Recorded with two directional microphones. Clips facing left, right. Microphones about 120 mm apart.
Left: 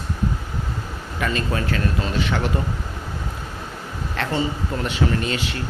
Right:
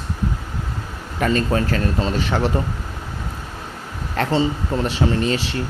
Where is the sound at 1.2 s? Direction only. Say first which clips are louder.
Right 5 dB; 40° right (ahead or behind).